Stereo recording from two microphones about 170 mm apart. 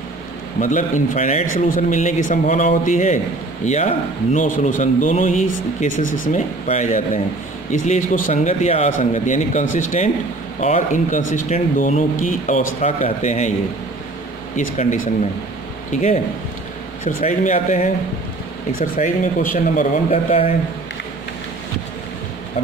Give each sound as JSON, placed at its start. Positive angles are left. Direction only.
{"t": 0.6, "sound": "speech", "side_deg": 50}
{"t": 14.6, "sound": "speech", "side_deg": 45}
{"t": 20.1, "sound": "speech", "side_deg": 35}